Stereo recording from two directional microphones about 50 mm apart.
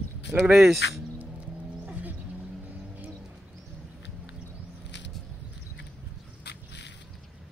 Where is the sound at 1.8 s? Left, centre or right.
Right.